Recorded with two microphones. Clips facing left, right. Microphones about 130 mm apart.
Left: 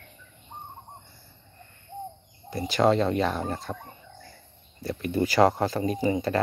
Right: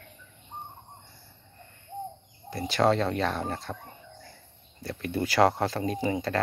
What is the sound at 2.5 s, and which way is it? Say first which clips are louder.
Speech: left 2 dB; centre (ahead or behind).